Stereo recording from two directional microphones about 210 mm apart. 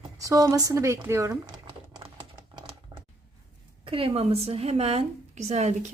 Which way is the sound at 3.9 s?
25° right (ahead or behind).